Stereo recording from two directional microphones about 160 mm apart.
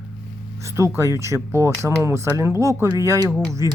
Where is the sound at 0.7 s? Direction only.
15° right (ahead or behind).